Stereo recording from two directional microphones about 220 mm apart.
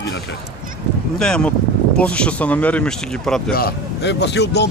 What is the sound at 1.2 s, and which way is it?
Speech, 5° left (ahead or behind).